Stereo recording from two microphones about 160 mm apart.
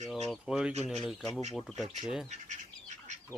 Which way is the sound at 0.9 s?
Centre (ahead or behind).